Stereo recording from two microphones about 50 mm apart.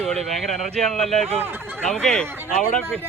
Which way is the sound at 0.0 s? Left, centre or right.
Centre.